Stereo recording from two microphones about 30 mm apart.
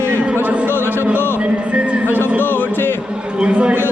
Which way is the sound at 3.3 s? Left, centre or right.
Right.